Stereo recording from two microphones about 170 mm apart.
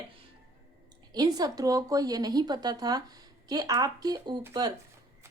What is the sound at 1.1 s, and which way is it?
A woman's voice, 25° right (ahead or behind).